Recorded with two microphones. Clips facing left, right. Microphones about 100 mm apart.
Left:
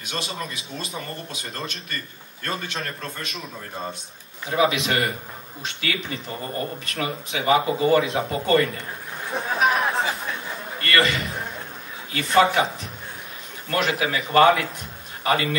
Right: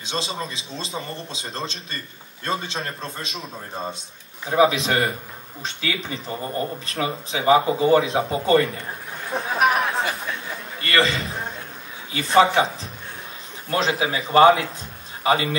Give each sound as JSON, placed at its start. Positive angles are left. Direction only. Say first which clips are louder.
{"t": 0.0, "sound": "a man's voice", "louder": "right 2 dB", "side_deg": -25}
{"t": 9.5, "sound": "a sound", "louder": "right 1 dB", "side_deg": -5}
{"t": 10.8, "sound": "a man's voice", "louder": "right 1 dB", "side_deg": -30}
{"t": 13.7, "sound": "a man's voice", "louder": "right 1 dB", "side_deg": -30}